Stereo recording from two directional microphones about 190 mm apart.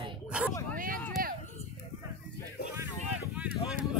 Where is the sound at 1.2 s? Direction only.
50° right (ahead or behind).